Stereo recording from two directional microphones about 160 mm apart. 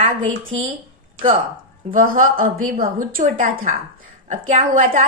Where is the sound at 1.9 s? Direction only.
55° right (ahead or behind).